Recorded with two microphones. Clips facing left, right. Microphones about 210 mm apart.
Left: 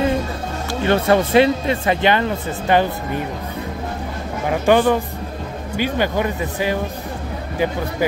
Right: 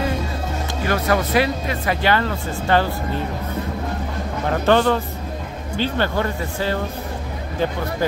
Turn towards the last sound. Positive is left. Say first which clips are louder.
# left 2 dB
turn(degrees=15)  # may be behind; listen again after turning